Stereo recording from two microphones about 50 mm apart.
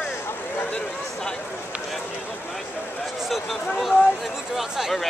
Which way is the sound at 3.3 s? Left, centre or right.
Centre.